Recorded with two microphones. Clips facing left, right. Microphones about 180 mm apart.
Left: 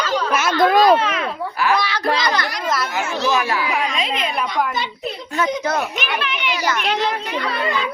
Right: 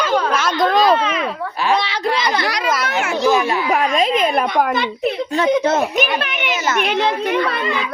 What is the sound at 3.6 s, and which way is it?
A child's voice, 50° right (ahead or behind).